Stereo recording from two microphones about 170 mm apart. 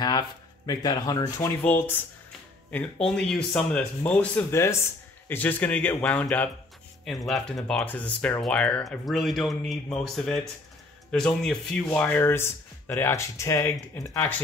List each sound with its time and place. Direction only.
0.7 s speech: 20° left (ahead or behind)